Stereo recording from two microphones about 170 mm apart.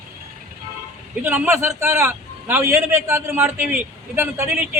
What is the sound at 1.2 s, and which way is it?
A man's voice, 10° right (ahead or behind).